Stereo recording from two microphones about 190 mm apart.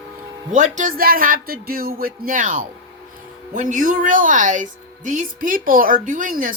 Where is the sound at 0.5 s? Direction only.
40° right (ahead or behind).